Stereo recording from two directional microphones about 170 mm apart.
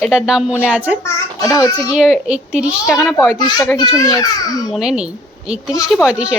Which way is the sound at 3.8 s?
25° left (ahead or behind).